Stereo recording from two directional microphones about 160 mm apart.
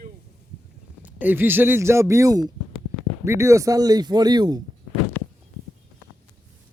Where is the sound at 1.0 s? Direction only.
10° right (ahead or behind).